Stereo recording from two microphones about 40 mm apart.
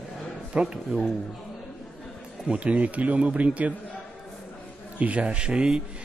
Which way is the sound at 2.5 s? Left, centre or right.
Right.